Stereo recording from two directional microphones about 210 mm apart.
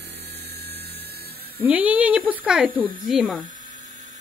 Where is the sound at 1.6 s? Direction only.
5° right (ahead or behind).